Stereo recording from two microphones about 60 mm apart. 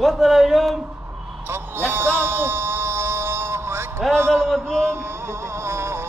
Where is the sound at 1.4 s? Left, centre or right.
Right.